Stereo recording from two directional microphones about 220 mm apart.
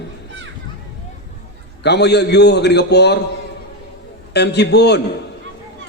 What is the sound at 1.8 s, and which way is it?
A man's voice, 50° left (ahead or behind).